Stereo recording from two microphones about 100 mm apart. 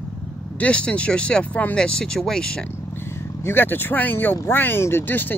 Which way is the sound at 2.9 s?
25° left (ahead or behind).